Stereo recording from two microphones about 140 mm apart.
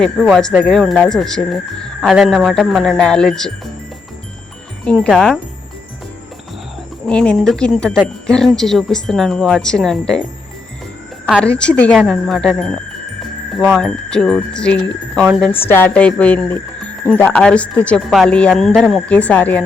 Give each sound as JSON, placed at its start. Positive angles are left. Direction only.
{"t": 0.0, "sound": "speech", "side_deg": 0}
{"t": 4.9, "sound": "speech", "side_deg": 5}
{"t": 7.1, "sound": "a woman's voice", "side_deg": 5}
{"t": 11.3, "sound": "a woman's voice", "side_deg": 5}